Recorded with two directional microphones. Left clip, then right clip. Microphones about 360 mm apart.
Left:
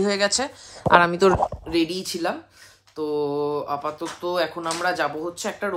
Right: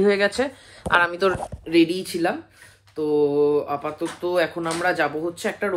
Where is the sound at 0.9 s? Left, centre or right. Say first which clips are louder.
Left 3 dB; left.